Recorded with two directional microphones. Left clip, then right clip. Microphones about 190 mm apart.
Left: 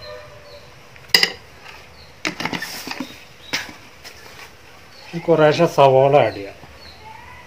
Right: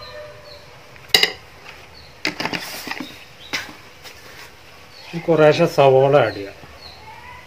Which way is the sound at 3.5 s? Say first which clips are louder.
Left 1 dB; 35° left (ahead or behind).